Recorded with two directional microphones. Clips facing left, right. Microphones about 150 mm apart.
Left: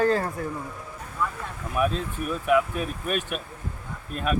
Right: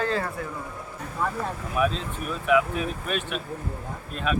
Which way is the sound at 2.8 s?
50° left (ahead or behind).